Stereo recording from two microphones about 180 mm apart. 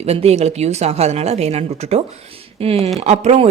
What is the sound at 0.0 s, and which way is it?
Speech, 35° right (ahead or behind).